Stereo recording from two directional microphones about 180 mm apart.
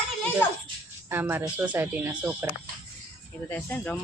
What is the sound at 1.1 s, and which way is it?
Speech, 10° right (ahead or behind).